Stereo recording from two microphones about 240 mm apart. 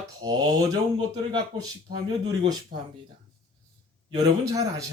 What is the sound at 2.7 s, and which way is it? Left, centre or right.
Speech, right.